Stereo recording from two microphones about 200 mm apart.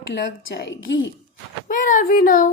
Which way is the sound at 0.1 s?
60° left (ahead or behind).